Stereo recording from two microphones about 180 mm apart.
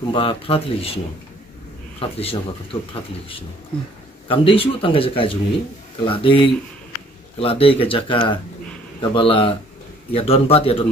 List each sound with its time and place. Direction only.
0.1 s a man's voice: 30° left (ahead or behind)